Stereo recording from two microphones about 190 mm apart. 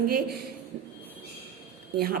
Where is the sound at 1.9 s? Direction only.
55° right (ahead or behind).